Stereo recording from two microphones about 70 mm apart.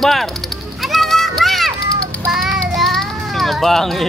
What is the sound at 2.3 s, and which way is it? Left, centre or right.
Child singing, centre.